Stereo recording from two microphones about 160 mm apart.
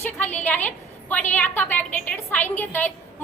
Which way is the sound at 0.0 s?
10° left (ahead or behind).